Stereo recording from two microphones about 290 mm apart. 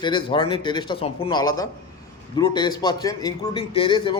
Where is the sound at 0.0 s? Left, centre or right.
Centre.